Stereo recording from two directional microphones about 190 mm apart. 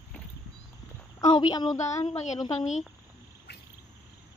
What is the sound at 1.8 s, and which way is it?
Speech, 35° left (ahead or behind).